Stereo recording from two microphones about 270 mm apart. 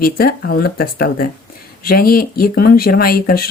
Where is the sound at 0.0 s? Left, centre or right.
Left.